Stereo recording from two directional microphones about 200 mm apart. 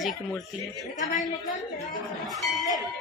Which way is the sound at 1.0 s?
40° left (ahead or behind).